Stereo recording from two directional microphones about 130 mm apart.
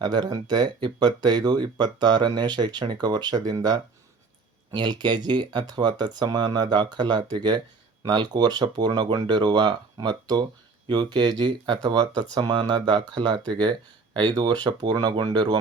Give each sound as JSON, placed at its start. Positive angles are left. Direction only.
{"t": 0.0, "sound": "speech", "side_deg": -30}